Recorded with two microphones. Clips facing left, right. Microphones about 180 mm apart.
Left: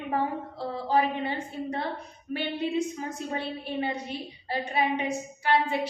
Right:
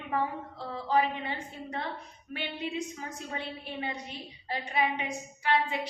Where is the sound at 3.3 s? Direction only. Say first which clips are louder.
Left 5 dB; 35° left (ahead or behind).